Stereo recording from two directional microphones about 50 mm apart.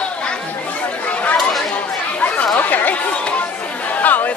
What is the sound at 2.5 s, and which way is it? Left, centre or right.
Chatter, left.